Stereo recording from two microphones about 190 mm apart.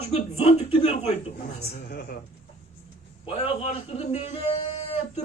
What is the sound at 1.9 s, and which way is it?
Speech, 50° left (ahead or behind).